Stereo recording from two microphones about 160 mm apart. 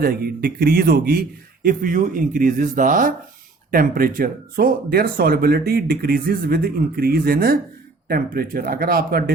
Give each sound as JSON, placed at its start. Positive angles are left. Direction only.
{"t": 0.0, "sound": "a man's voice", "side_deg": -70}